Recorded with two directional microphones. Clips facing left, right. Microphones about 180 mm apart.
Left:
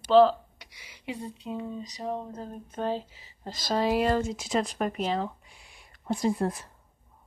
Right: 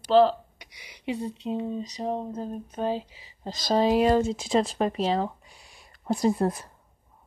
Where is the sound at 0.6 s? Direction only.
15° right (ahead or behind).